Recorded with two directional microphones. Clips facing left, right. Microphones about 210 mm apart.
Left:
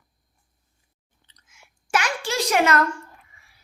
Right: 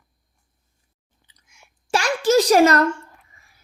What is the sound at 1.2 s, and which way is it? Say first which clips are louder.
Chewing: right 1 dB; 10° right (ahead or behind).